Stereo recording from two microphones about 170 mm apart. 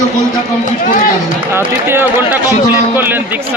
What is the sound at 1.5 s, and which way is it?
A man's voice, 15° right (ahead or behind).